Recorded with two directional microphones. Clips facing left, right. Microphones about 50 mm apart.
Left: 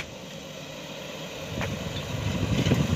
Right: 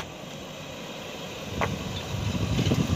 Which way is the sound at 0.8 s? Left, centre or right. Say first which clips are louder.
Even; centre.